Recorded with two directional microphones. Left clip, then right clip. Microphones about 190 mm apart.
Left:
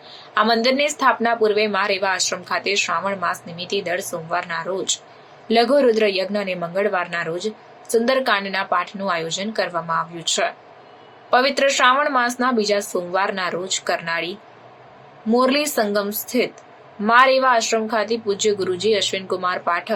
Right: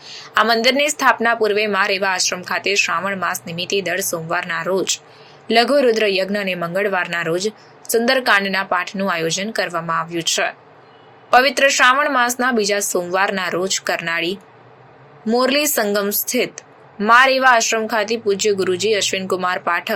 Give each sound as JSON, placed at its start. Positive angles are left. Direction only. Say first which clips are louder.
{"t": 0.1, "sound": "speech", "louder": "right 2 dB", "side_deg": -15}